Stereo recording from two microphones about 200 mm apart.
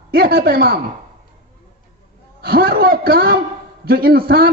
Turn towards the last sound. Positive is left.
turn(degrees=-50)  # may be behind; listen again after turning